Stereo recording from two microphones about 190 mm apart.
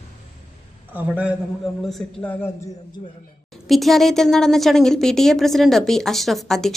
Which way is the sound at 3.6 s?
Centre (ahead or behind).